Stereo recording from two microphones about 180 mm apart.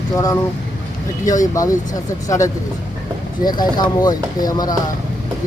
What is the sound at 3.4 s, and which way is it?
Speech, 25° left (ahead or behind).